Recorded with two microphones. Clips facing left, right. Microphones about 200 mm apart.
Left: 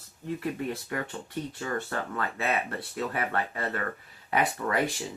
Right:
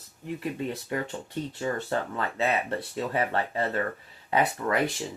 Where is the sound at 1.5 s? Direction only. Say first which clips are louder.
Right 5 dB; 25° right (ahead or behind).